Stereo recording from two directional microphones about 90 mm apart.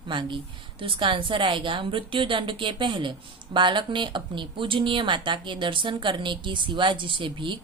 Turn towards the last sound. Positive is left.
turn(degrees=-65)  # may be behind; listen again after turning